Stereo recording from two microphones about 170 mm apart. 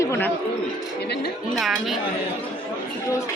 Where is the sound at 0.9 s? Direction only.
75° left (ahead or behind).